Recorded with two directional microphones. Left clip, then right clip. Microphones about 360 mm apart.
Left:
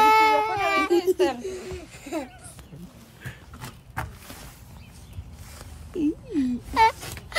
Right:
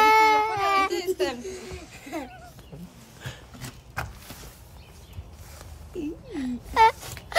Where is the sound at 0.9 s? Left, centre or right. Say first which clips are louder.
Left 5 dB; centre.